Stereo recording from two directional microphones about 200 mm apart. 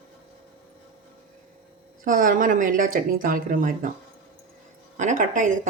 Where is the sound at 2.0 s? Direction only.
40° right (ahead or behind).